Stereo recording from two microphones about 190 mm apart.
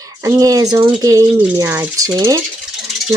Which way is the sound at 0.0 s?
20° right (ahead or behind).